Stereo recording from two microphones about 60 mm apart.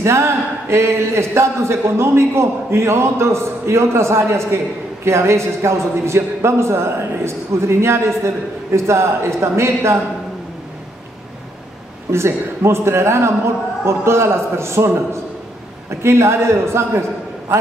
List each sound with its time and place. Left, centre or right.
0.0 s a man's voice: right
12.1 s a man's voice: right
16.0 s a man's voice: right